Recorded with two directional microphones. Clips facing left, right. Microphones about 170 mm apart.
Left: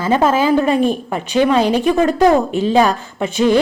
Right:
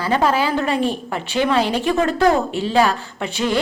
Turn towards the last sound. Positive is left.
turn(degrees=20)  # may be behind; listen again after turning